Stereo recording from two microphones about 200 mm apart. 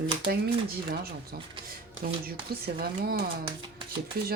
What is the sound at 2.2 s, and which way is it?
Speech, 50° right (ahead or behind).